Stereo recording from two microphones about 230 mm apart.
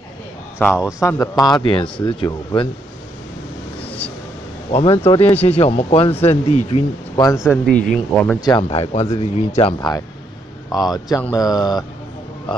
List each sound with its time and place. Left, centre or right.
0.7 s speech: centre
0.9 s speech: centre
4.6 s speech: left
7.6 s speech: centre
8.4 s speech: centre